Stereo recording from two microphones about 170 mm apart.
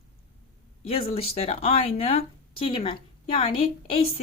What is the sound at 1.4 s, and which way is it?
A woman's voice, 40° left (ahead or behind).